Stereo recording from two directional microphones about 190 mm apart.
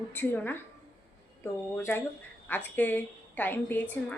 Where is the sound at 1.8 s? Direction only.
15° left (ahead or behind).